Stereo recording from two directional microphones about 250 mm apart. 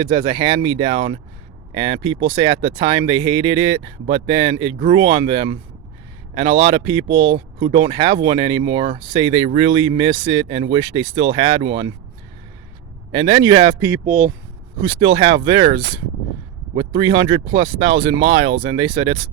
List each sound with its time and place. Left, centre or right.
0.0 s speech: centre
13.1 s speech: centre